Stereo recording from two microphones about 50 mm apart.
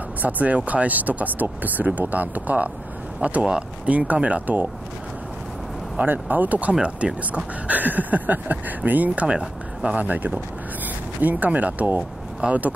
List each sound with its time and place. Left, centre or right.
0.2 s speech: right
6.0 s speech: right
9.9 s speech: right